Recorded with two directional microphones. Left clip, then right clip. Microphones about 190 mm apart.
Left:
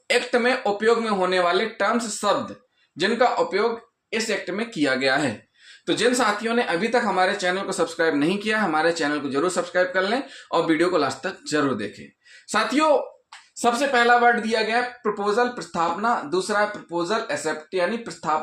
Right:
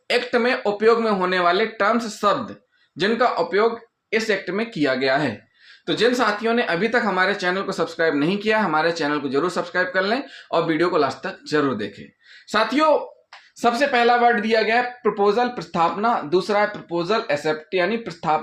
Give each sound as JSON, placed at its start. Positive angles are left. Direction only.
{"t": 0.1, "sound": "speech", "side_deg": -20}
{"t": 13.6, "sound": "speech", "side_deg": -35}